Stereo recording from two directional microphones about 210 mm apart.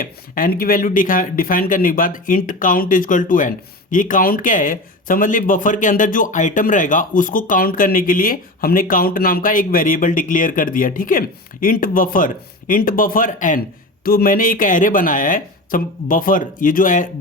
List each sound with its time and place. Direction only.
0.0 s speech: 40° left (ahead or behind)